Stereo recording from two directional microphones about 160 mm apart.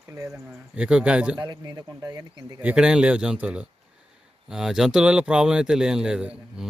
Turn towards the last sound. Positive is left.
turn(degrees=-5)  # may be behind; listen again after turning